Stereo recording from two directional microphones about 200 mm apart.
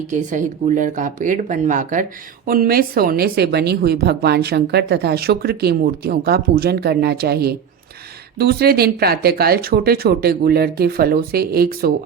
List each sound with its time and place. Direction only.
0.1 s speech: 40° right (ahead or behind)